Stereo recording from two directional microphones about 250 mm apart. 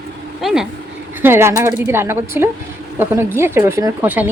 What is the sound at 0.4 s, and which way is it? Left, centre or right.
A woman's voice, centre.